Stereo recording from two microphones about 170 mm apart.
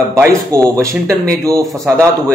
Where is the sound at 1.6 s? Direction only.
Centre (ahead or behind).